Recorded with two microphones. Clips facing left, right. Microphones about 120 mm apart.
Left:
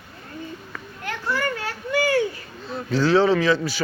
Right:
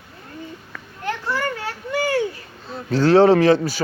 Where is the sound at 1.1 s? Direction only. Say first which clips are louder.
Right 2 dB; 25° right (ahead or behind).